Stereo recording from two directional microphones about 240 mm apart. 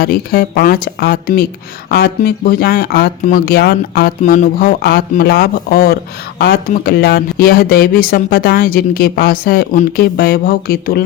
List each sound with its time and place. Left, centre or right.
0.0 s speech: left